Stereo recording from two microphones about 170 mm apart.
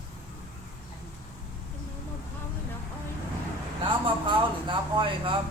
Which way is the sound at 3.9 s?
30° right (ahead or behind).